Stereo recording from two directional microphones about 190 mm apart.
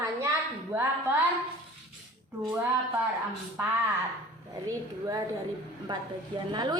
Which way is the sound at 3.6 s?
10° right (ahead or behind).